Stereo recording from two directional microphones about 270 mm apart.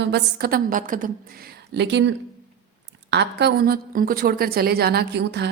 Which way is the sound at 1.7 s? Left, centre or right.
Right.